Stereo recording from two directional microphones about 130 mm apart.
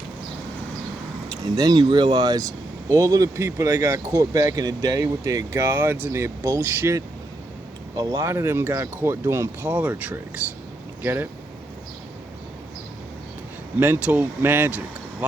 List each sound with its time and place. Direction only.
1.5 s speech: 30° right (ahead or behind)
13.7 s speech: 15° right (ahead or behind)